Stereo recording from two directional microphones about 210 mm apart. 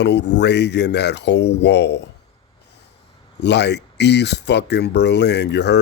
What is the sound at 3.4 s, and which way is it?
Speech, 55° left (ahead or behind).